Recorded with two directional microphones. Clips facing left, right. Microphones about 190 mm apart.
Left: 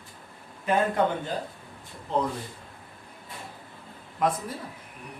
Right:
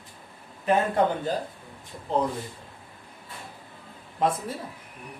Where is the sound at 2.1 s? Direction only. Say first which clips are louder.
Right 2 dB; 35° right (ahead or behind).